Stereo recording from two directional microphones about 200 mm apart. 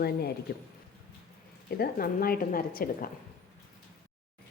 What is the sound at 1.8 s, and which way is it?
A woman's voice, 45° left (ahead or behind).